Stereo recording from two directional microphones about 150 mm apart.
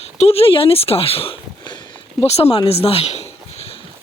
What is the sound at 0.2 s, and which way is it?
Speech, 40° left (ahead or behind).